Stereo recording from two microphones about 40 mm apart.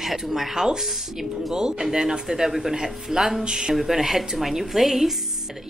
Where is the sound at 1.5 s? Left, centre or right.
Centre.